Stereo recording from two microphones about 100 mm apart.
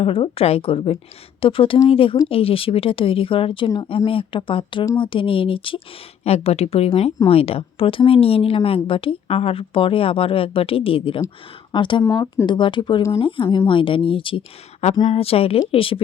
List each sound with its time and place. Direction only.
0.0 s a woman's voice: 70° left (ahead or behind)
6.2 s speech: 90° left
7.3 s a woman's voice: 75° left (ahead or behind)
11.7 s a woman's voice: 55° left (ahead or behind); by 15.6 s 75° left (ahead or behind)
15.7 s speech: 65° left (ahead or behind)